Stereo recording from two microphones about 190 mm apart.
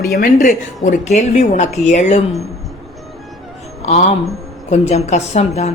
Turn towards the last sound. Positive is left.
turn(degrees=35)  # may be behind; listen again after turning